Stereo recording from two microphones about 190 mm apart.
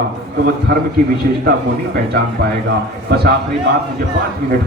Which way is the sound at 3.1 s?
55° right (ahead or behind).